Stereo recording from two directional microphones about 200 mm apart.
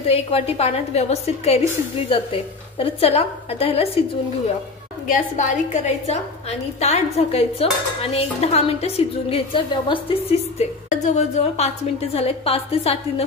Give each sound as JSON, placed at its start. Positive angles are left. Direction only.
{"t": 0.0, "sound": "a woman's voice", "side_deg": 30}
{"t": 5.0, "sound": "a woman's voice", "side_deg": 40}
{"t": 10.9, "sound": "a woman's voice", "side_deg": 35}